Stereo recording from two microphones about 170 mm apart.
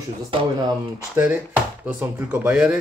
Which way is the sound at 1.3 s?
10° right (ahead or behind).